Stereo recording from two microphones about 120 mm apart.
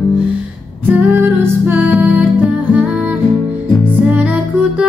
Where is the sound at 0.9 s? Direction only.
15° right (ahead or behind).